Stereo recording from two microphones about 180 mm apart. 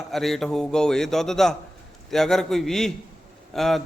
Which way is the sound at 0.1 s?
Centre (ahead or behind).